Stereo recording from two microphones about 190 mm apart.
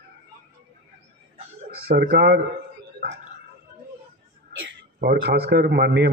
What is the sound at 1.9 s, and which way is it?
Speech, 55° right (ahead or behind).